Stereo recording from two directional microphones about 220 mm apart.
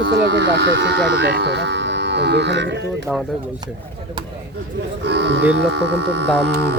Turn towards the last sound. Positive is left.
turn(degrees=-50)  # may be behind; listen again after turning